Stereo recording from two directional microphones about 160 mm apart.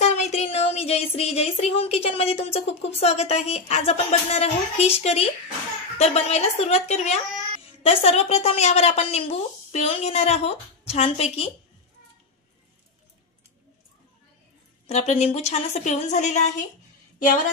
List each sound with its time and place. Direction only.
0.0 s a woman's voice: 45° left (ahead or behind)
14.9 s a woman's voice: 45° left (ahead or behind)